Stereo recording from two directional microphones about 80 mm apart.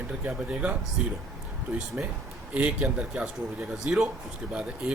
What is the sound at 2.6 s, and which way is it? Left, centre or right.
A man's voice, centre.